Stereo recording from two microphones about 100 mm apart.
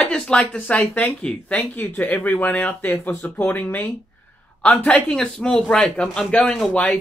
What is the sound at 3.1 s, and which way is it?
Speech, 30° left (ahead or behind).